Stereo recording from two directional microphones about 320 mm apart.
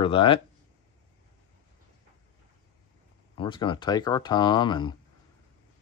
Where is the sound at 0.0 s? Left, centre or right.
Centre.